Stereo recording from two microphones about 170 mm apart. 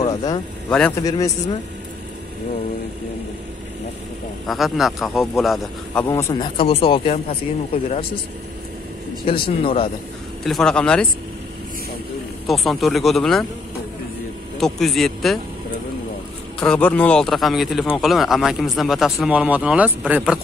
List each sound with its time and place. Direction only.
0.7 s speech: 5° left (ahead or behind)
1.0 s speech: 20° left (ahead or behind)
4.5 s speech: centre (ahead or behind)
6.0 s speech: 20° left (ahead or behind)
6.5 s speech: 30° left (ahead or behind)
9.2 s speech: 30° left (ahead or behind)
10.4 s speech: centre (ahead or behind)
12.4 s speech: centre (ahead or behind)
14.6 s speech: centre (ahead or behind)
16.5 s speech: 5° left (ahead or behind)